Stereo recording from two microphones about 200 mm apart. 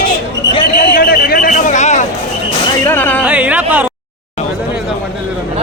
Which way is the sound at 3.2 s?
5° right (ahead or behind).